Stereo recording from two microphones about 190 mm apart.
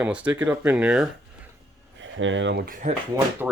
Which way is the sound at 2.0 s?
80° right.